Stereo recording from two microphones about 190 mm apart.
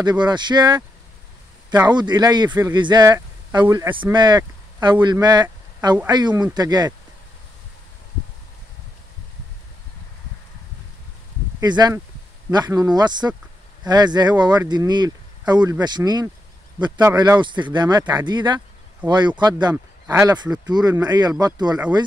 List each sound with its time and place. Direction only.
0.0 s speech: 20° right (ahead or behind)
11.6 s speech: 20° right (ahead or behind)